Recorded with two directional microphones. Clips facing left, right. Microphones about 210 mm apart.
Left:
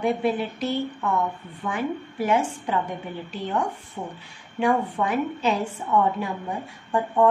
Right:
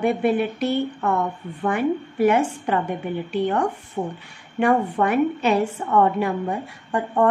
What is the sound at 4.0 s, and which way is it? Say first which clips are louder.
Speech: right 8 dB; 40° right (ahead or behind).